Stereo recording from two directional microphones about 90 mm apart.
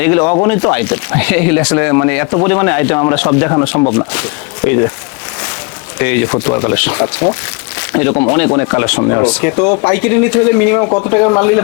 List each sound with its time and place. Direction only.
0.0 s speech: 15° left (ahead or behind)
6.0 s speech: 15° left (ahead or behind)
9.2 s speech: 15° left (ahead or behind)